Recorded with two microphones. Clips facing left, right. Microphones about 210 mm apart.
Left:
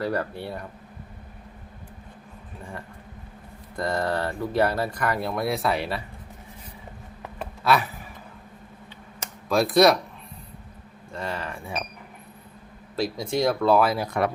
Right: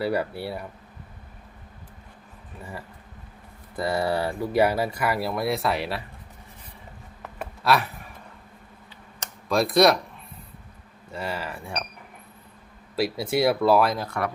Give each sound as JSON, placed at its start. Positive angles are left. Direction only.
{"t": 0.0, "sound": "speech", "side_deg": -10}
{"t": 2.6, "sound": "speech", "side_deg": -5}
{"t": 7.3, "sound": "a sound", "side_deg": 0}
{"t": 9.5, "sound": "speech", "side_deg": 0}
{"t": 11.1, "sound": "speech", "side_deg": -5}
{"t": 13.0, "sound": "speech", "side_deg": -5}
{"t": 14.0, "sound": "speech", "side_deg": 20}